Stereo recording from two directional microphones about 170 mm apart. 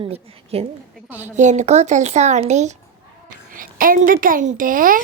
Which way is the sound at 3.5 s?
55° right (ahead or behind).